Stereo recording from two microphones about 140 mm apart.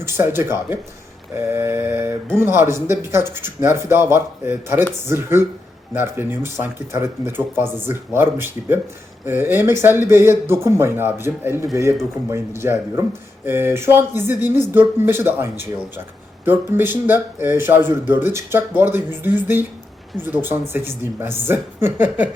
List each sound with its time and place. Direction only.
0.0 s speech: 20° right (ahead or behind)